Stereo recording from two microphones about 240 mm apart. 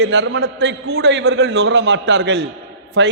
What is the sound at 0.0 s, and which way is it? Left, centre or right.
A man's voice, right.